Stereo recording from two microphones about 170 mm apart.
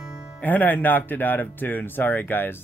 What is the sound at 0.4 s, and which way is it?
Speech, 10° left (ahead or behind).